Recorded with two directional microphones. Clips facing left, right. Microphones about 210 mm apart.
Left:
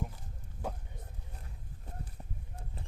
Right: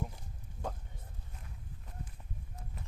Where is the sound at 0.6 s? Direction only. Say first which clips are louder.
Left 1 dB; 10° right (ahead or behind).